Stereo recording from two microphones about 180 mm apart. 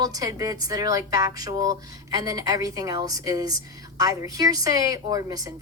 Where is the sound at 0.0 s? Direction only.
20° right (ahead or behind).